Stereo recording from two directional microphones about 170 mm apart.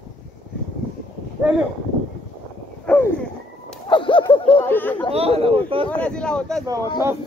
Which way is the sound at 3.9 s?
30° left (ahead or behind).